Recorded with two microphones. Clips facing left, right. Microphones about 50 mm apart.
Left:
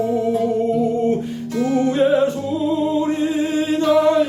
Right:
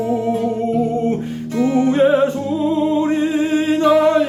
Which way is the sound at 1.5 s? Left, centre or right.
Right.